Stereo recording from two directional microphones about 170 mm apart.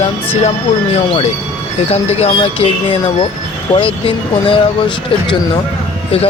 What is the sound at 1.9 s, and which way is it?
Speech, 40° left (ahead or behind).